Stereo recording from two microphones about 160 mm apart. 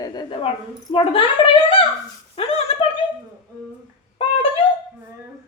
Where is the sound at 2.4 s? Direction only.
35° left (ahead or behind).